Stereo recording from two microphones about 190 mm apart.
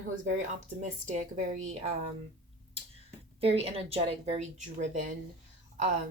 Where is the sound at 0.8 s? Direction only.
40° right (ahead or behind).